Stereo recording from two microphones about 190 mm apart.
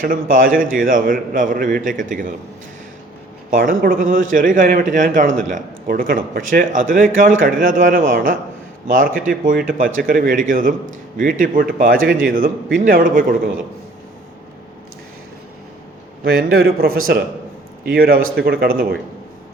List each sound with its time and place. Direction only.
0.0 s a man's voice: 45° right (ahead or behind)
3.5 s a man's voice: 50° right (ahead or behind)
16.2 s a man's voice: 50° right (ahead or behind)